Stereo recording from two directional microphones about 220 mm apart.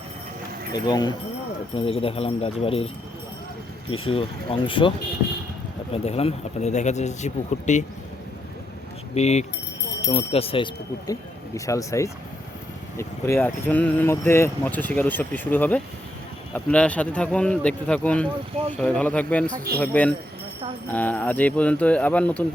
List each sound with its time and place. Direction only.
0.7 s speech: 20° left (ahead or behind)
3.9 s speech: 25° left (ahead or behind)
9.1 s speech: 30° left (ahead or behind); by 19.5 s 5° left (ahead or behind)
19.5 s a man's voice: 40° right (ahead or behind)
19.8 s speech: 5° left (ahead or behind)